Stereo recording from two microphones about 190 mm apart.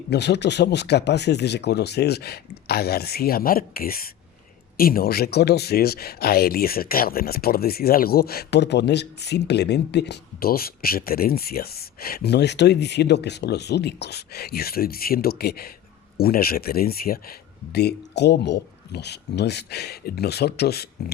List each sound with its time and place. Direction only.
0.1 s speech: 65° left (ahead or behind)